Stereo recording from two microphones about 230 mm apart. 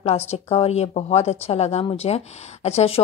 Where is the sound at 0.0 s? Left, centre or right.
Left.